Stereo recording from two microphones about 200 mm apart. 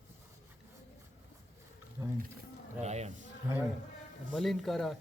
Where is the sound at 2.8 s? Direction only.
35° right (ahead or behind).